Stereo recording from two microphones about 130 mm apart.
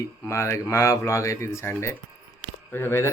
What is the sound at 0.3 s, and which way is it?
Speech, 20° left (ahead or behind).